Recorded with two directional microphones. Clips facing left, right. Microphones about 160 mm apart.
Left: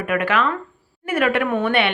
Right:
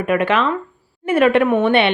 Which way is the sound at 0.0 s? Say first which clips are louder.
Right 3 dB; 25° right (ahead or behind).